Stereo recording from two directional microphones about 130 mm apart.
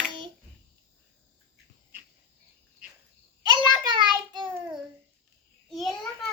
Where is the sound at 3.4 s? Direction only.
35° right (ahead or behind).